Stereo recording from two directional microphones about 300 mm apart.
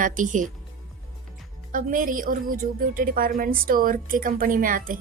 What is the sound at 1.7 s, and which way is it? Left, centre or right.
A woman's voice, right.